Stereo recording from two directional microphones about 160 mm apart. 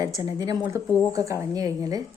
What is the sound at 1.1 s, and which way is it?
Speech, 20° right (ahead or behind).